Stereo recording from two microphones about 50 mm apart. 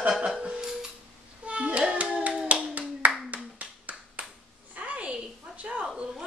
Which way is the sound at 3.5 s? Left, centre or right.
Right.